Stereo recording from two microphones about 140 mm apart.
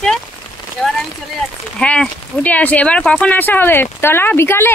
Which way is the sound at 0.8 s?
5° left (ahead or behind).